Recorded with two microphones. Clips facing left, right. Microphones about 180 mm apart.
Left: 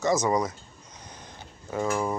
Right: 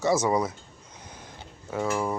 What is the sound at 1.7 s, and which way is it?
Speech, 5° right (ahead or behind).